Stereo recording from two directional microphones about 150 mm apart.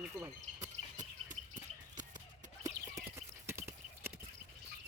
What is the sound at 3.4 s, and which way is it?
Clip-clop, 15° right (ahead or behind).